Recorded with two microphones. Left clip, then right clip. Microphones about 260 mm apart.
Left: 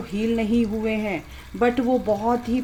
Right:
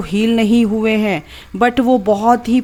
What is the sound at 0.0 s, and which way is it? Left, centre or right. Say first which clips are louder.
Speech: right 9 dB; right.